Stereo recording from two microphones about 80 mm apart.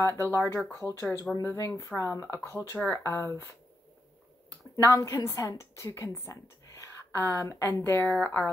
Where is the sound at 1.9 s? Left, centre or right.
Left.